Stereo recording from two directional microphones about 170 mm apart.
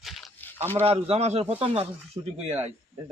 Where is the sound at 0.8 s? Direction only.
35° right (ahead or behind).